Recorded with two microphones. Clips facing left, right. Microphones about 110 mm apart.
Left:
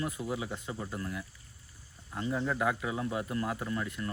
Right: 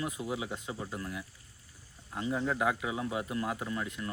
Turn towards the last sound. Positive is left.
turn(degrees=-10)  # may be behind; listen again after turning